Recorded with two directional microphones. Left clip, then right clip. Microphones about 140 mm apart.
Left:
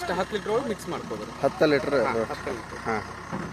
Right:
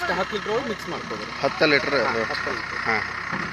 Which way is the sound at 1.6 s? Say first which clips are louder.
Right 3 dB; 20° left (ahead or behind).